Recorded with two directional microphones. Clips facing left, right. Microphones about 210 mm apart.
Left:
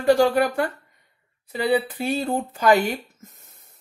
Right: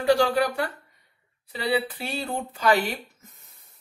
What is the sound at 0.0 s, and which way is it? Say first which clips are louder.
Speech: left 3 dB; 50° left (ahead or behind).